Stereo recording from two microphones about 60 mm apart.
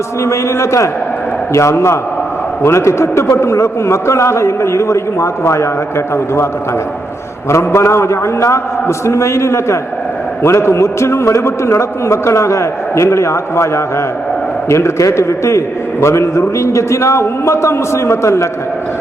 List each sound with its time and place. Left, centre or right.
0.3 s a man's voice: left
7.5 s a man's voice: left